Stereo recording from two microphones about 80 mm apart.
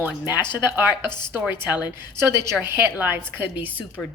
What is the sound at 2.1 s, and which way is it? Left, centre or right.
A woman's voice, right.